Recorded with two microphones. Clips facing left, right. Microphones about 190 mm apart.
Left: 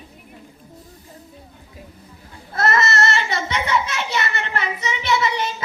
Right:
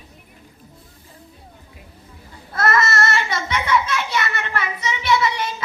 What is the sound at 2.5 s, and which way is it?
Child singing, 25° left (ahead or behind).